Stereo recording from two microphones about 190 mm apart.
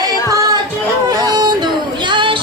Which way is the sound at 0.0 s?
20° right (ahead or behind).